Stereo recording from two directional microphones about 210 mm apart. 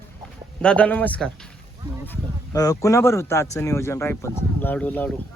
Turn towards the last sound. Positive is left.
turn(degrees=10)  # may be behind; listen again after turning